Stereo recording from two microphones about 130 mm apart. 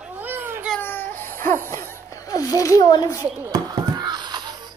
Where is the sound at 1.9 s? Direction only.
25° left (ahead or behind).